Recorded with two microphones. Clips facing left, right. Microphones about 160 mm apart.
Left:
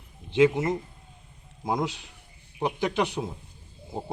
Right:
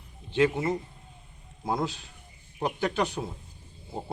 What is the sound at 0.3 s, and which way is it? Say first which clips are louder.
Speech: left 4 dB; 15° left (ahead or behind).